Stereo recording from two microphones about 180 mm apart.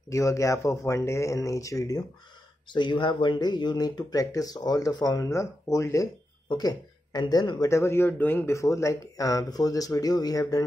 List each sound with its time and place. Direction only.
0.1 s speech: 15° left (ahead or behind)